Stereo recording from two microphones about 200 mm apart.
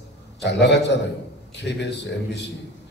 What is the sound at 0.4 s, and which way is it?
A man's voice, 60° left (ahead or behind).